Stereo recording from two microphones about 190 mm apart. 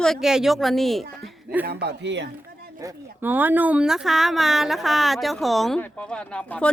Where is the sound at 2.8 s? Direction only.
15° right (ahead or behind).